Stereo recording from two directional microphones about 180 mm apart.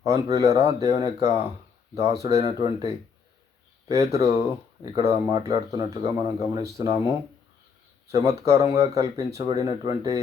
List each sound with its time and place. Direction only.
0.0 s speech: 20° right (ahead or behind)